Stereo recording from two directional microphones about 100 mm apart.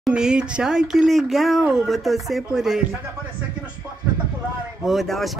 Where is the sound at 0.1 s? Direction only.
10° right (ahead or behind).